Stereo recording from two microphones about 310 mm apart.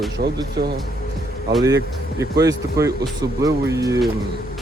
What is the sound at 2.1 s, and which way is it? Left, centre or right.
Speech, centre.